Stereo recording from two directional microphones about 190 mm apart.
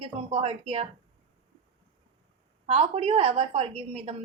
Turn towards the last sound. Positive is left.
turn(degrees=-35)  # may be behind; listen again after turning